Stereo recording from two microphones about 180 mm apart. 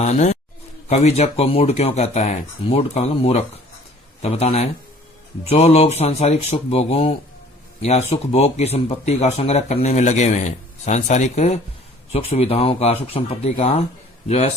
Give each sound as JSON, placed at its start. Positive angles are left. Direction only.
{"t": 0.0, "sound": "speech", "side_deg": 40}